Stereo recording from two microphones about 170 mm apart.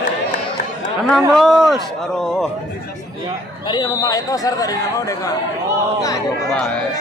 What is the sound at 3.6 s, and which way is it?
Speech, 25° left (ahead or behind).